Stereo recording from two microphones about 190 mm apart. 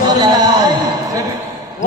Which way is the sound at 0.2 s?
20° right (ahead or behind).